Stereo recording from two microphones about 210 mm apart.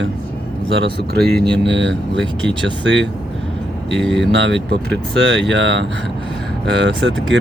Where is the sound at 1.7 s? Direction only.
60° right (ahead or behind).